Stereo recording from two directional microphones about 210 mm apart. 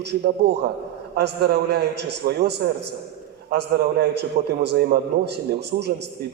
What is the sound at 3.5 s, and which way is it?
A man's voice, 50° right (ahead or behind).